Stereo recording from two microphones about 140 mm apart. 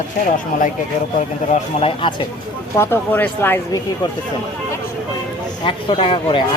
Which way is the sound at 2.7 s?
15° left (ahead or behind).